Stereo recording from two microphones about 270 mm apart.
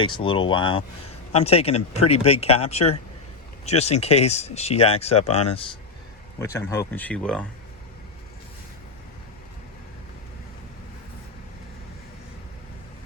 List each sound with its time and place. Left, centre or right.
0.0 s speech: centre
6.4 s speech: centre